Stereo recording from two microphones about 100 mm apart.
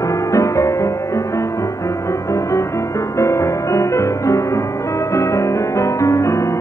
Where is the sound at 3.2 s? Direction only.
30° left (ahead or behind).